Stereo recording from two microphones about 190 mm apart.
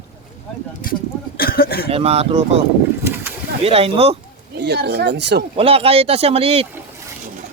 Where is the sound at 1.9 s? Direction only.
30° right (ahead or behind).